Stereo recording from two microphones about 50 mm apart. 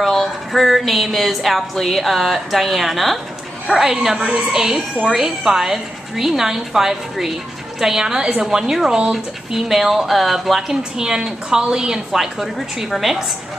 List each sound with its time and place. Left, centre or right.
0.0 s a woman's voice: centre
10.8 s a woman's voice: centre